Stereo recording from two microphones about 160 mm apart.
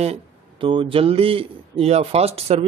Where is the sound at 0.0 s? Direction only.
35° right (ahead or behind).